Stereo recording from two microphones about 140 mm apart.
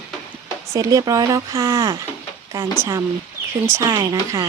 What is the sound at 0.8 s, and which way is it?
Speech, 25° right (ahead or behind).